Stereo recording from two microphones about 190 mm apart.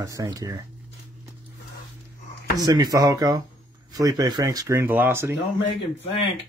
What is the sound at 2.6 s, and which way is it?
Speech, 20° right (ahead or behind).